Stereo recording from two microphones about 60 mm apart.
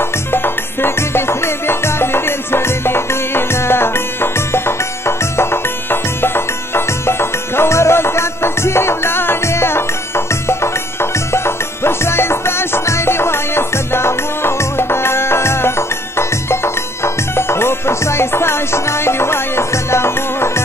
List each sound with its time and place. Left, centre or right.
0.3 s music: left